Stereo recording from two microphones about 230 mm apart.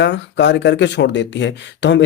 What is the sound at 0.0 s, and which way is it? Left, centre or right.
Speech, left.